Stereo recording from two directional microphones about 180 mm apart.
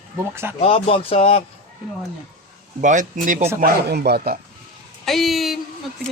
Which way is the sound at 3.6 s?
65° right (ahead or behind).